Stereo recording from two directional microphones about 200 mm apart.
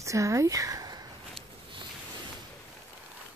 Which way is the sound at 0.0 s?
15° right (ahead or behind).